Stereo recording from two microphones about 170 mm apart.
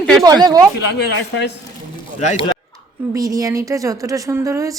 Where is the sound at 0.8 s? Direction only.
80° left.